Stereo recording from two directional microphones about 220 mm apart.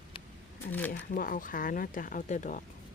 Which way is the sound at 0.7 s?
5° left (ahead or behind).